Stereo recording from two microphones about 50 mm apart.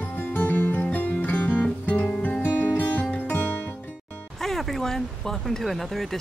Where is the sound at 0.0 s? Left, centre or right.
Left.